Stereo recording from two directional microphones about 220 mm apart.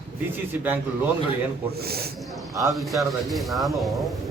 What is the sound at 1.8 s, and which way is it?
Speech, 45° right (ahead or behind).